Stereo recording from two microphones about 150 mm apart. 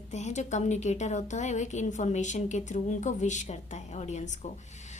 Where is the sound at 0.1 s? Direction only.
50° left (ahead or behind).